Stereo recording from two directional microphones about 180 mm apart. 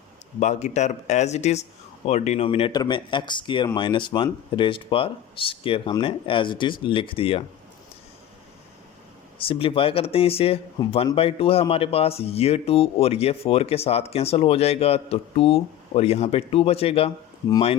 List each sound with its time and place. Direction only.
0.3 s speech: 40° left (ahead or behind)
9.5 s speech: 30° left (ahead or behind)